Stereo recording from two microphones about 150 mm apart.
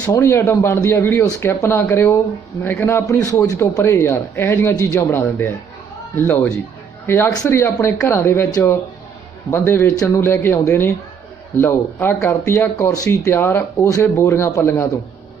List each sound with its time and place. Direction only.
0.0 s speech: 15° left (ahead or behind)